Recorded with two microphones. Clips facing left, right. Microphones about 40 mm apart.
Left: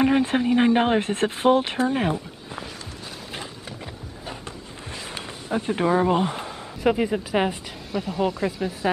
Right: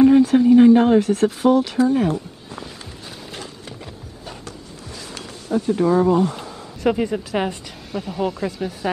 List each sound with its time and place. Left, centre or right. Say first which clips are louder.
0.0 s speech: right 7 dB; left
3.6 s horse: even; centre
4.5 s a sound: even; left
6.8 s speech: right 2 dB; centre